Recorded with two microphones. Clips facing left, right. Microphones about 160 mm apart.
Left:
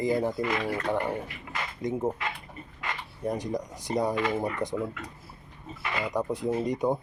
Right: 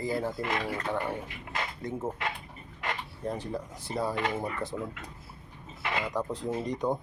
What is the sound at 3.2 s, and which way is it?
Speech, 15° left (ahead or behind).